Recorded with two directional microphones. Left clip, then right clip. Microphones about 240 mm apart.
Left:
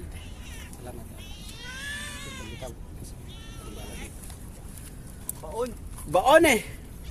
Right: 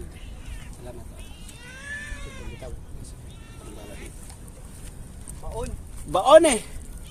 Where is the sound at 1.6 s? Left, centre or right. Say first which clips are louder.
Even; left.